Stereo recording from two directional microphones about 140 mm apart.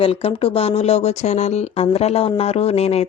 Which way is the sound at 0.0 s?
40° left (ahead or behind).